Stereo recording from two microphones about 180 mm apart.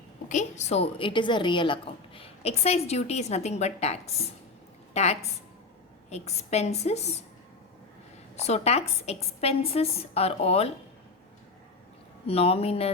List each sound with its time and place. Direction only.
0.3 s a woman's voice: 40° left (ahead or behind)
8.4 s a woman's voice: 35° left (ahead or behind)
12.2 s a woman's voice: 35° left (ahead or behind)